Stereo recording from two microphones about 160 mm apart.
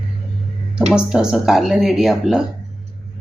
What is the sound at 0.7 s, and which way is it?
Speech, 5° right (ahead or behind).